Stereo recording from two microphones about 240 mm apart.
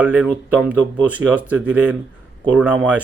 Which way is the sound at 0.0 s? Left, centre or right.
Centre.